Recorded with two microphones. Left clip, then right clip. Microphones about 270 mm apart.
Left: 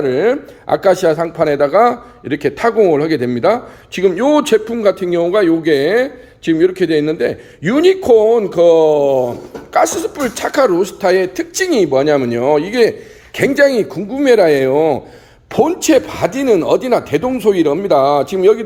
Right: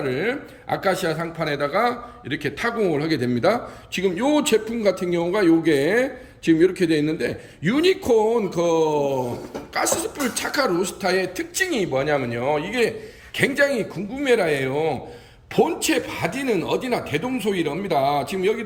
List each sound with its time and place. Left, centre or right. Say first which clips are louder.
0.0 s speech: left 10 dB; centre